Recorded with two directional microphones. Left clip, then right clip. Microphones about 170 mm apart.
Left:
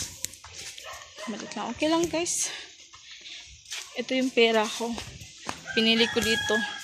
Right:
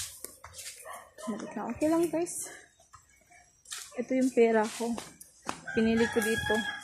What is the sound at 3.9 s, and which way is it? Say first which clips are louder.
Speech: left 2 dB; centre (ahead or behind).